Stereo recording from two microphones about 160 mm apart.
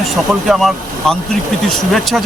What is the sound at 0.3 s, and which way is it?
Speech, centre (ahead or behind).